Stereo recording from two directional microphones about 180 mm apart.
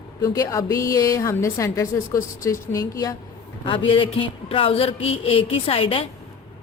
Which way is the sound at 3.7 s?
30° left (ahead or behind).